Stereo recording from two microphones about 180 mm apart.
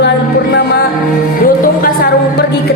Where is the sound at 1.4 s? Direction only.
55° left (ahead or behind).